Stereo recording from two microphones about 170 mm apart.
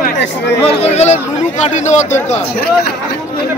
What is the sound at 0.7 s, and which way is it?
Speech, 40° left (ahead or behind).